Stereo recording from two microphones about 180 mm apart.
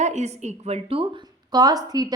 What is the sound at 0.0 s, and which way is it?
A woman's voice, 40° right (ahead or behind).